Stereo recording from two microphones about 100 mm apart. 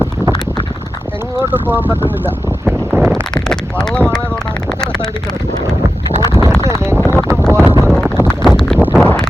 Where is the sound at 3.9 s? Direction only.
10° left (ahead or behind).